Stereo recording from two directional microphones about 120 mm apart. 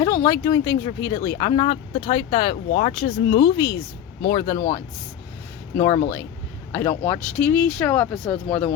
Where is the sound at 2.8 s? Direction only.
60° left (ahead or behind).